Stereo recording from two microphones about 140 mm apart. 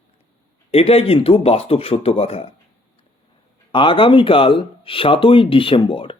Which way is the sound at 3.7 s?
35° left (ahead or behind).